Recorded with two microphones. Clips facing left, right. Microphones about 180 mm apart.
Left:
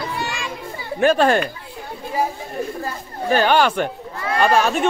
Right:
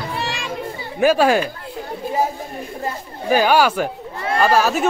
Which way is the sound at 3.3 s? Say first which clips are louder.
Right 1 dB; 10° right (ahead or behind).